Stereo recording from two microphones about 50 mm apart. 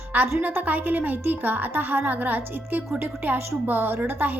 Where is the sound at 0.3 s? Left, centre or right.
Right.